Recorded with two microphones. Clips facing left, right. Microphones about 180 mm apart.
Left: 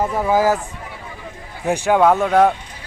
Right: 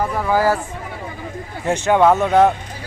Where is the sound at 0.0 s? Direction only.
20° left (ahead or behind).